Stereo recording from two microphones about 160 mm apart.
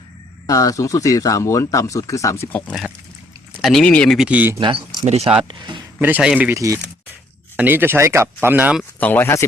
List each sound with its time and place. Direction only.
0.4 s speech: 20° left (ahead or behind); by 4.3 s 5° left (ahead or behind)
4.3 s speech: 10° right (ahead or behind)
4.5 s speech: 30° right (ahead or behind)
5.4 s speech: 30° right (ahead or behind)
6.0 s speech: 10° right (ahead or behind)
6.5 s speech: 20° right (ahead or behind)
8.8 s speech: 10° left (ahead or behind)